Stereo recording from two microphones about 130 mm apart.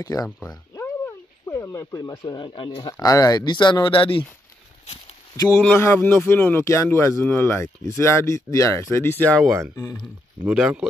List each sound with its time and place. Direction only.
0.0 s speech: 30° left (ahead or behind)
0.5 s a sound: 20° left (ahead or behind)
2.0 s speech: 35° left (ahead or behind)
5.4 s speech: 25° left (ahead or behind)
10.4 s speech: 10° right (ahead or behind)